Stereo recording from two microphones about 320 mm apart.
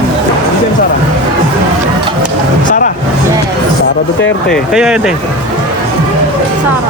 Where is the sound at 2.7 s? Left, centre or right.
Left.